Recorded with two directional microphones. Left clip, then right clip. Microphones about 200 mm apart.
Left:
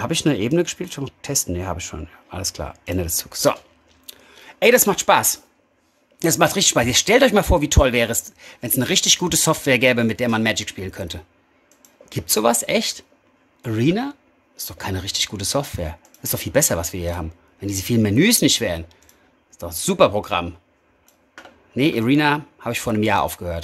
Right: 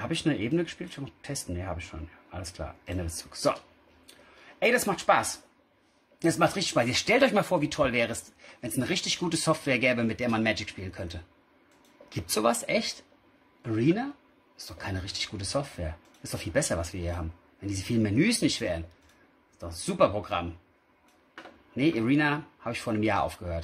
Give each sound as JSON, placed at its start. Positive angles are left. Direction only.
{"t": 0.0, "sound": "speech", "side_deg": 45}
{"t": 4.1, "sound": "a sound", "side_deg": 45}
{"t": 6.1, "sound": "speech", "side_deg": 45}
{"t": 21.7, "sound": "speech", "side_deg": 40}